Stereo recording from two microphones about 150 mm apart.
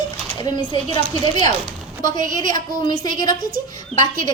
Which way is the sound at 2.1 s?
60° right (ahead or behind).